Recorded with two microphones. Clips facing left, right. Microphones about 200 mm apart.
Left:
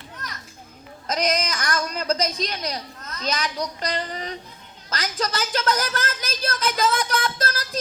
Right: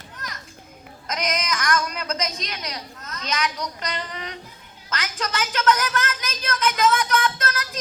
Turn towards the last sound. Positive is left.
turn(degrees=35)  # may be behind; listen again after turning